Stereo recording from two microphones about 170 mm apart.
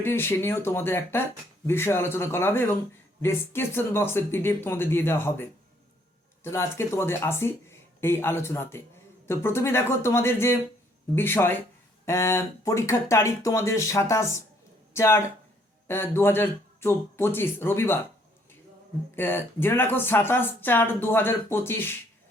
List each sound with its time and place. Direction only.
0.0 s speech: 15° left (ahead or behind)
19.1 s speech: 10° left (ahead or behind)